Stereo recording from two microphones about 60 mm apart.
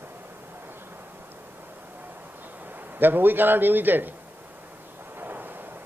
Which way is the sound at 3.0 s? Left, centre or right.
Right.